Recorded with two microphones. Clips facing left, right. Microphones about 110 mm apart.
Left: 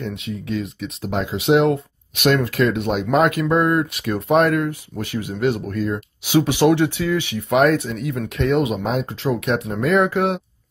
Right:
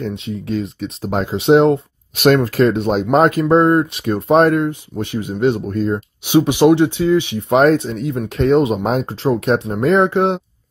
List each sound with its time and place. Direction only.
0.0 s speech: 30° right (ahead or behind)